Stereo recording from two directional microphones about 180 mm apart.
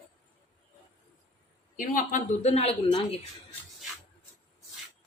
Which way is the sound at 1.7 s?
45° left (ahead or behind).